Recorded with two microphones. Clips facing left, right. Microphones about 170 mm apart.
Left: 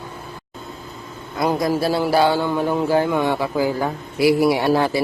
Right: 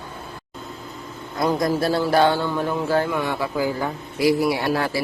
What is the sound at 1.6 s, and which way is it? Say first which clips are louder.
A man's voice: left 1 dB; 5° left (ahead or behind).